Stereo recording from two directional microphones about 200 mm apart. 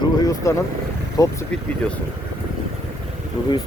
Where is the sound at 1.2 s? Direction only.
15° left (ahead or behind).